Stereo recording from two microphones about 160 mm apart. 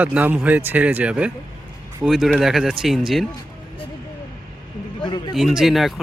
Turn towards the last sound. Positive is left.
turn(degrees=0)  # may be behind; listen again after turning